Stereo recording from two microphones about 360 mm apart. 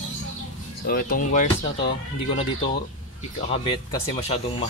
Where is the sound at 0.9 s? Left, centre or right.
Left.